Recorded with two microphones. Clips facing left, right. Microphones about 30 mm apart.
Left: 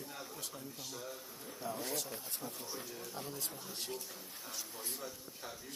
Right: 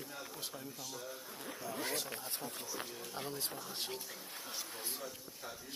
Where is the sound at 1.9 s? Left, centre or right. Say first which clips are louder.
Right 1 dB; right.